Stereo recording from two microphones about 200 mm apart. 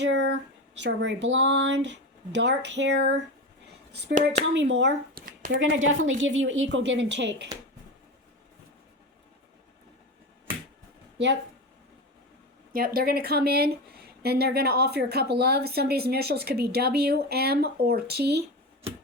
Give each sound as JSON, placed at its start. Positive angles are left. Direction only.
{"t": 0.0, "sound": "speech", "side_deg": -60}
{"t": 4.5, "sound": "speech", "side_deg": -60}
{"t": 5.5, "sound": "a woman's voice", "side_deg": -75}
{"t": 12.7, "sound": "speech", "side_deg": -45}